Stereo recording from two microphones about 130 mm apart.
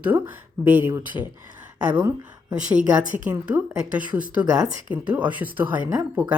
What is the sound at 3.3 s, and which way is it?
Speech, 10° right (ahead or behind).